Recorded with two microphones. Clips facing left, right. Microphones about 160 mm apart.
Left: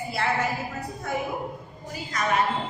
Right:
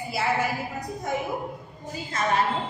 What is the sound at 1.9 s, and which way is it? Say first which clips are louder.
Speech: right 1 dB; 25° right (ahead or behind).